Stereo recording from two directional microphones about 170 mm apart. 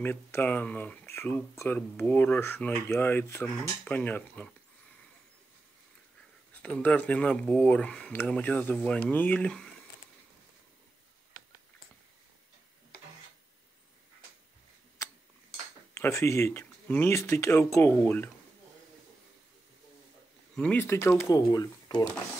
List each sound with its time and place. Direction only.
0.0 s speech: 10° left (ahead or behind)
6.6 s speech: 5° left (ahead or behind)
15.9 s speech: 15° left (ahead or behind)
20.5 s speech: 10° left (ahead or behind)